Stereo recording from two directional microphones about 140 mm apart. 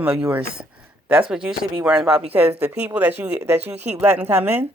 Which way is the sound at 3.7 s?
50° right (ahead or behind).